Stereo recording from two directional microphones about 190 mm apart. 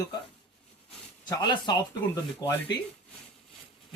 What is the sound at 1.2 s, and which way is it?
Speech, 20° left (ahead or behind).